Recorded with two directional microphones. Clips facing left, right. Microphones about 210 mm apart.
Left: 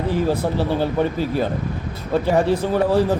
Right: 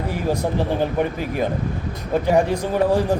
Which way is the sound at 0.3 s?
15° right (ahead or behind).